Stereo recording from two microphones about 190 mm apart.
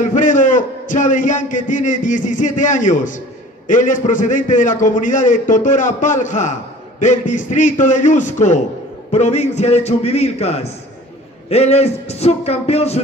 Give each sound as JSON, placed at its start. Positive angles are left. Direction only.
{"t": 0.1, "sound": "a man's voice", "side_deg": 40}